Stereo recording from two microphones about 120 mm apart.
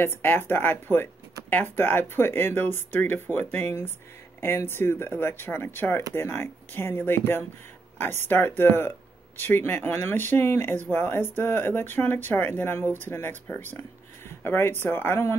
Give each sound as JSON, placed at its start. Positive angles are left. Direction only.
{"t": 0.0, "sound": "speech", "side_deg": 20}